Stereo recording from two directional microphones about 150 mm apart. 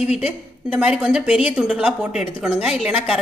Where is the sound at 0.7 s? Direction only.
5° right (ahead or behind).